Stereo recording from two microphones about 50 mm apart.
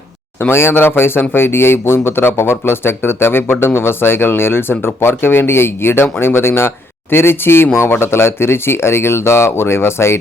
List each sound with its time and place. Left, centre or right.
0.3 s speech: left